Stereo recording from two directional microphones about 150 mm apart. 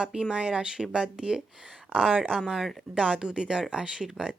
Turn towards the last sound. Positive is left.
turn(degrees=-5)  # may be behind; listen again after turning